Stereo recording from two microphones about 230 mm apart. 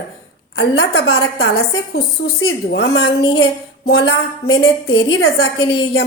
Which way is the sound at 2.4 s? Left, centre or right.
Left.